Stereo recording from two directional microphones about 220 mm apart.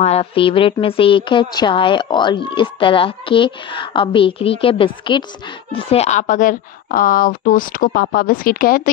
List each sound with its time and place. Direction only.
0.0 s a woman's voice: 25° left (ahead or behind)